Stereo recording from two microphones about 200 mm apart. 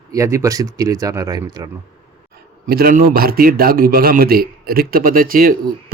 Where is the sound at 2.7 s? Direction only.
50° right (ahead or behind).